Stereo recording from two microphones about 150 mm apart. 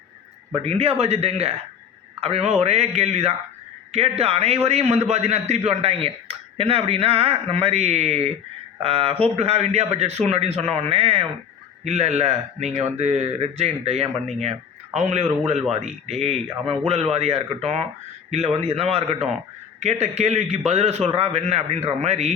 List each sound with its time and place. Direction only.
0.5 s a man's voice: 40° right (ahead or behind)